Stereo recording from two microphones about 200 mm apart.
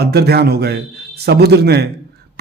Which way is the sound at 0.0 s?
55° right (ahead or behind).